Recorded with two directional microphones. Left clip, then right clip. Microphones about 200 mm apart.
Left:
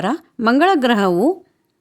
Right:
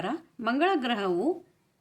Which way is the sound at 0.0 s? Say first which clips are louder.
Left 12 dB; 65° left (ahead or behind).